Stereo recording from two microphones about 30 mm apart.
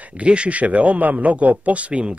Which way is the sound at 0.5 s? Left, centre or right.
Right.